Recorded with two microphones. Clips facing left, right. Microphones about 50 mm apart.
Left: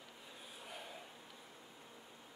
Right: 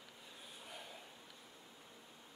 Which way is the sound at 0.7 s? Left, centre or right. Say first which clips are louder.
Left 2 dB; centre.